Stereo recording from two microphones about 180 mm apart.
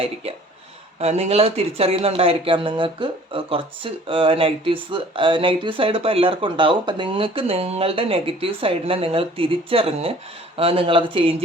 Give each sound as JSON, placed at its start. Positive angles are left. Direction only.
{"t": 0.9, "sound": "speech", "side_deg": -35}